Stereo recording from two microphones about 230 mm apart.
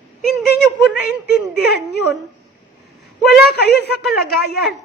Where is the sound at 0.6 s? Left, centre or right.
Centre.